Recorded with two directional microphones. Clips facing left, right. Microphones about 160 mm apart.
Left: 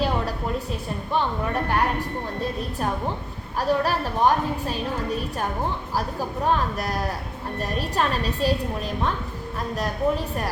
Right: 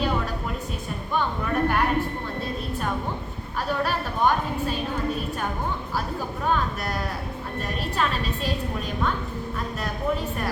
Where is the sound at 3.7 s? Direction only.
35° left (ahead or behind).